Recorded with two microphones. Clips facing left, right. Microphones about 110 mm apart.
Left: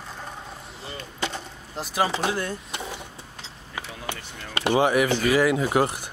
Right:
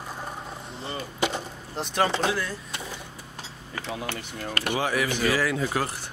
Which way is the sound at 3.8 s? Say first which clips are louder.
Right 2 dB; 20° left (ahead or behind).